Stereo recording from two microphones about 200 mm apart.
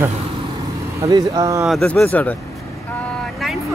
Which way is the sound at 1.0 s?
20° right (ahead or behind).